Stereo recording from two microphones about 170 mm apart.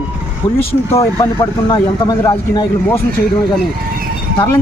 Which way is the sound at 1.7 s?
25° left (ahead or behind).